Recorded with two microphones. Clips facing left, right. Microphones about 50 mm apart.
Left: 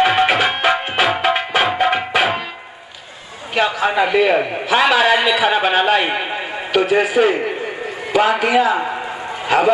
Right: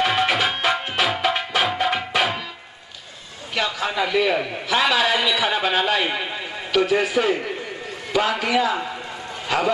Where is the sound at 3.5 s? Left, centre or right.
Left.